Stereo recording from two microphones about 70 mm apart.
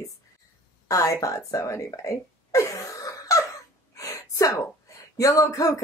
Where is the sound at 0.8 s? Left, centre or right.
Left.